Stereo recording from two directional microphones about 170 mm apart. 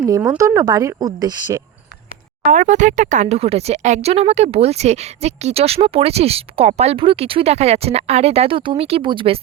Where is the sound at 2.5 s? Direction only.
45° right (ahead or behind).